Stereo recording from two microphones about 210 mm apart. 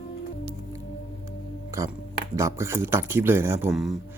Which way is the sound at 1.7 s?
15° right (ahead or behind).